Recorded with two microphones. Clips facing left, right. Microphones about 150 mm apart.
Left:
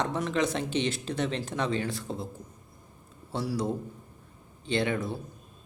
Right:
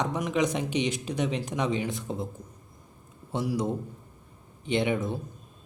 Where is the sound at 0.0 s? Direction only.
15° right (ahead or behind).